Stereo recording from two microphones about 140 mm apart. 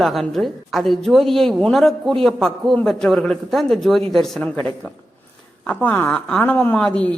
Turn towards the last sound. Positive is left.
turn(degrees=5)  # may be behind; listen again after turning